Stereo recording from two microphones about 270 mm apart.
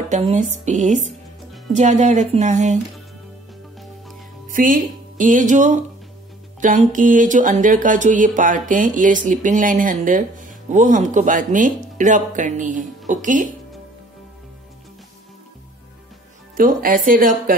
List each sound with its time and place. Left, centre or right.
0.3 s speech: right
4.5 s speech: right
16.5 s a woman's voice: right